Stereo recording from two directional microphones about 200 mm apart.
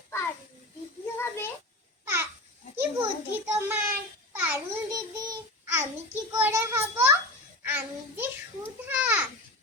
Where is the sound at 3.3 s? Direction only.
10° right (ahead or behind).